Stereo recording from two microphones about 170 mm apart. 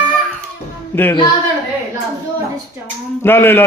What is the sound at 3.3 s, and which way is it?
Speech, 15° left (ahead or behind).